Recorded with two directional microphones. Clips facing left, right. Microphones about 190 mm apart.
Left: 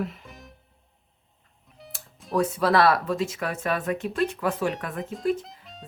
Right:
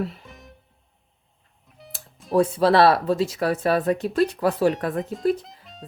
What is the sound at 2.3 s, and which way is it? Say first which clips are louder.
Speech: right 4 dB; 30° right (ahead or behind).